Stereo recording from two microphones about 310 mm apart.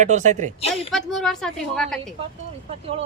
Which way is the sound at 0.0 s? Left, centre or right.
Right.